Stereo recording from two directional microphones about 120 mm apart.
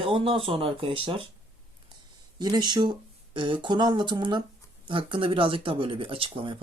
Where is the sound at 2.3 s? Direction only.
35° right (ahead or behind).